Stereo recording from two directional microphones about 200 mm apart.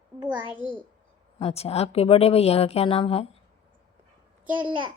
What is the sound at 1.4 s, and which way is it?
Speech, 30° left (ahead or behind).